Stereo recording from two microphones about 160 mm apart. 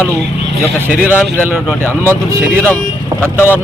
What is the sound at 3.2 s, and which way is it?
Speech, 15° left (ahead or behind).